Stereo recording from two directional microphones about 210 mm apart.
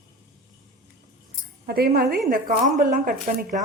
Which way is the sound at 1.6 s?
45° right (ahead or behind).